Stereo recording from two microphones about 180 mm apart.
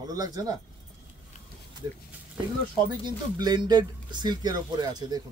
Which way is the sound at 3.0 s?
25° right (ahead or behind).